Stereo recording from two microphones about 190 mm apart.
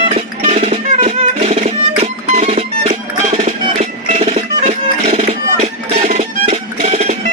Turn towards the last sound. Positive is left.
turn(degrees=-35)  # may be behind; listen again after turning